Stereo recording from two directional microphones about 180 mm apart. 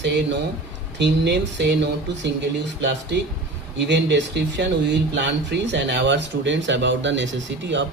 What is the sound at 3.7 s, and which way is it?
A man's voice, 75° right (ahead or behind).